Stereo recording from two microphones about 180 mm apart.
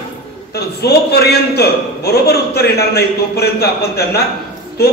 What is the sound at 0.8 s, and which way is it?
A man's voice, 65° left (ahead or behind).